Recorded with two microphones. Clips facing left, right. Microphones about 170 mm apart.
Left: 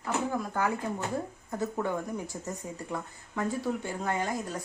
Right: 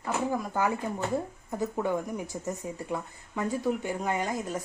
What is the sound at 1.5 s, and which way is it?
A woman's voice, 15° right (ahead or behind).